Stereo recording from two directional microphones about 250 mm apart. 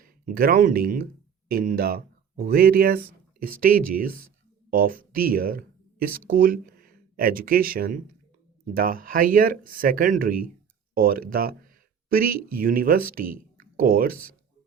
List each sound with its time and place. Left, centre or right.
0.0 s speech: right